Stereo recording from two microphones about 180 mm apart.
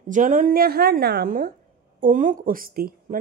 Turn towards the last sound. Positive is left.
turn(degrees=-55)  # may be behind; listen again after turning